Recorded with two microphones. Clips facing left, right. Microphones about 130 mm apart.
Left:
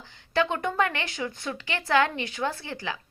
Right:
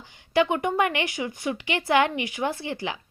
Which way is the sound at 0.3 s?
15° right (ahead or behind).